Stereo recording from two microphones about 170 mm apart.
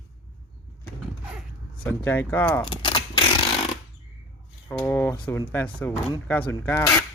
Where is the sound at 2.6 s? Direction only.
30° left (ahead or behind).